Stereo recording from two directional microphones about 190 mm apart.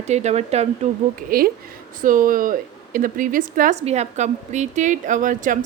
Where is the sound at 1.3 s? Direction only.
50° right (ahead or behind).